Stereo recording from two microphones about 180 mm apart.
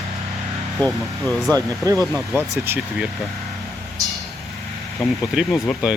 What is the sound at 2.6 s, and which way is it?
Speech, 10° right (ahead or behind).